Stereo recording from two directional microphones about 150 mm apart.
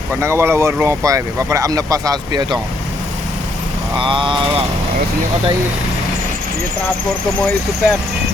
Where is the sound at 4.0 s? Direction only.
35° right (ahead or behind).